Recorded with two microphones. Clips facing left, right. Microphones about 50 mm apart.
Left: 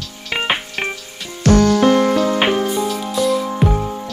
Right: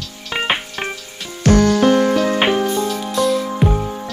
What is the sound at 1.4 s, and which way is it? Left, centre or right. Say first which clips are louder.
Music: left 1 dB; right.